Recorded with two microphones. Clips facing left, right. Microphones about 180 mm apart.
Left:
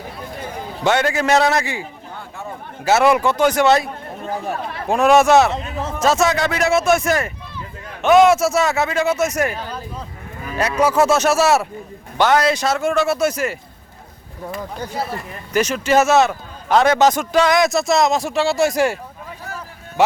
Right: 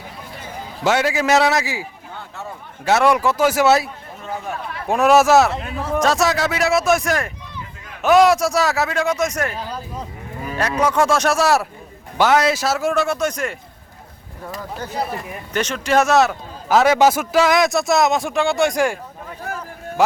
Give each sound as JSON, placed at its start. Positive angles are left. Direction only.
{"t": 0.9, "sound": "a man's voice", "side_deg": -5}
{"t": 4.3, "sound": "speech", "side_deg": 35}
{"t": 4.9, "sound": "a man's voice", "side_deg": 0}
{"t": 10.6, "sound": "a man's voice", "side_deg": 5}
{"t": 15.5, "sound": "a man's voice", "side_deg": 5}
{"t": 19.5, "sound": "a sound", "side_deg": -55}